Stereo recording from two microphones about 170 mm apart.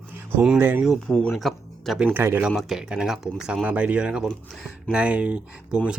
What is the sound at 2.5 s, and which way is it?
Speech, centre (ahead or behind).